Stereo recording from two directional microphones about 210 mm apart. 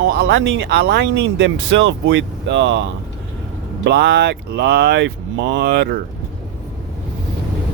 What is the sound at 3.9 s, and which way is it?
Speech, 55° right (ahead or behind).